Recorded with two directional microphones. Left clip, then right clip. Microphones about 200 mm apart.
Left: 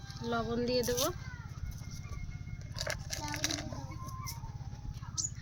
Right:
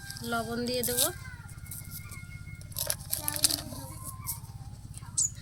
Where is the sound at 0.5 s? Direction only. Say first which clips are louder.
Even; 25° left (ahead or behind).